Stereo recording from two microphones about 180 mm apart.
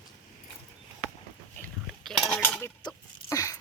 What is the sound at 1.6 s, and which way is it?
Cutlery, 5° left (ahead or behind).